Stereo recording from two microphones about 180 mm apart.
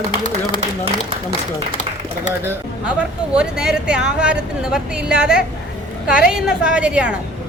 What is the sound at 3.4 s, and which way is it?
A woman's voice, 5° right (ahead or behind).